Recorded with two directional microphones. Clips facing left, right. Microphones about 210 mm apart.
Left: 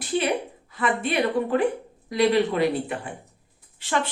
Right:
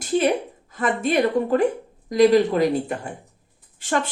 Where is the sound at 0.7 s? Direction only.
45° right (ahead or behind).